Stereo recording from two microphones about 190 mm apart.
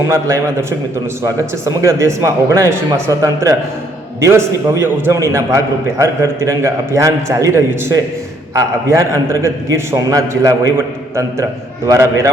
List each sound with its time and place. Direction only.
0.1 s a man's voice: 15° right (ahead or behind)